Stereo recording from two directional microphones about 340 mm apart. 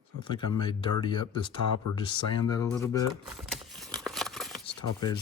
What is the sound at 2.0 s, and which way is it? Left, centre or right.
Speech, centre.